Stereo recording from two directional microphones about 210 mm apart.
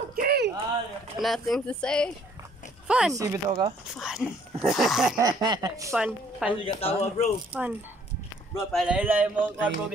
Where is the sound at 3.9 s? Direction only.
5° right (ahead or behind).